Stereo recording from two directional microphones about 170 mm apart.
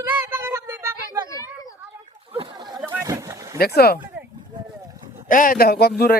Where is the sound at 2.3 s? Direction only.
30° right (ahead or behind).